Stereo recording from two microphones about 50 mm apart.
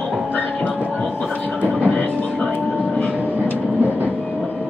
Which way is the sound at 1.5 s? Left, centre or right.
Right.